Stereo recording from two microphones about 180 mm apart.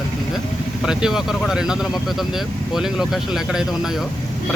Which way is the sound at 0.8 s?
5° right (ahead or behind).